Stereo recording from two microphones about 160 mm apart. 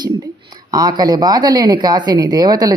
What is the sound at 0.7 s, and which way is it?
A woman's voice, 25° right (ahead or behind).